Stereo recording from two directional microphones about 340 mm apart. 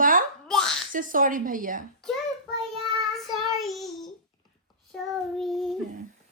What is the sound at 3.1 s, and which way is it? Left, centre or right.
Child singing, centre.